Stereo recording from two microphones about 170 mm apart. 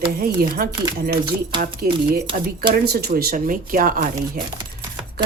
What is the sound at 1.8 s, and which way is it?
Speech, 60° right (ahead or behind).